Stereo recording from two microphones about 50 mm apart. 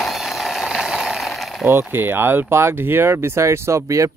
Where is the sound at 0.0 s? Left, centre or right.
Centre.